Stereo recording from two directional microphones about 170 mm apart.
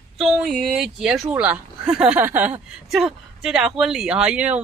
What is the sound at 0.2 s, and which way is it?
Speech, centre (ahead or behind).